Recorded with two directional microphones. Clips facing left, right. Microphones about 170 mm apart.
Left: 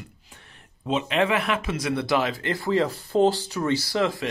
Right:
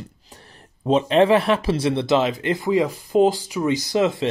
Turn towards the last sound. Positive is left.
turn(degrees=-20)  # may be behind; listen again after turning